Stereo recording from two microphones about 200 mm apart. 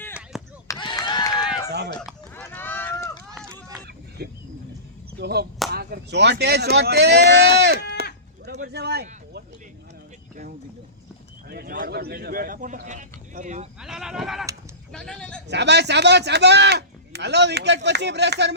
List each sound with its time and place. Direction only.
0.3 s chop: centre (ahead or behind)
0.7 s a sound: 20° left (ahead or behind)
1.4 s run: 5° right (ahead or behind)
4.2 s wild animals: 55° right (ahead or behind)
5.2 s speech: 55° right (ahead or behind)
8.6 s a sound: 55° right (ahead or behind)
11.4 s speech: 50° right (ahead or behind)
13.8 s sheep: centre (ahead or behind)
14.9 s a sound: 5° left (ahead or behind)
15.4 s speech: 60° right (ahead or behind)